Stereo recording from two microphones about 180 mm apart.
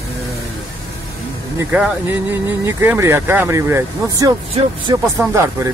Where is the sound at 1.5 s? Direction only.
10° right (ahead or behind).